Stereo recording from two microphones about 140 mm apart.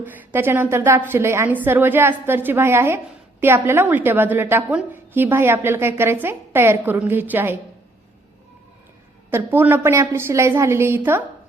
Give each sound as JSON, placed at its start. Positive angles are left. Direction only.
{"t": 0.0, "sound": "a woman's voice", "side_deg": -15}
{"t": 9.3, "sound": "a woman's voice", "side_deg": -15}